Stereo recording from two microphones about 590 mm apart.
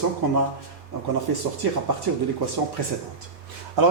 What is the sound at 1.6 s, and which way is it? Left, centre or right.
Speech, right.